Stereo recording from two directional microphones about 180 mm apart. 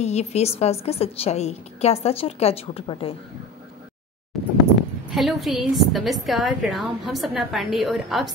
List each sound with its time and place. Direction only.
0.0 s a woman's voice: 35° left (ahead or behind)
4.3 s a sound: centre (ahead or behind)
5.1 s a woman's voice: centre (ahead or behind)